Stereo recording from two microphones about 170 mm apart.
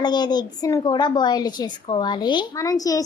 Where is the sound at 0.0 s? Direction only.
25° left (ahead or behind).